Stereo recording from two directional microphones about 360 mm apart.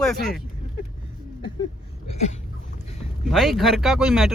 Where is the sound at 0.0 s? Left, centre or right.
Centre.